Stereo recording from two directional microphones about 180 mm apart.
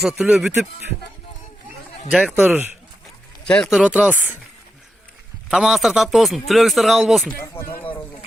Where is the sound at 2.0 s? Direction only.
5° right (ahead or behind).